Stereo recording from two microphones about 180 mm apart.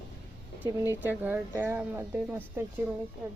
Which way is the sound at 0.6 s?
25° left (ahead or behind).